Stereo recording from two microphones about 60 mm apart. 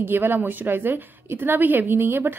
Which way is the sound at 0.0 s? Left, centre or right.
Right.